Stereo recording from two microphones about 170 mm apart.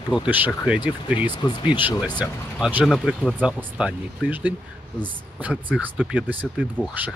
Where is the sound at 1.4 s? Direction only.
25° left (ahead or behind).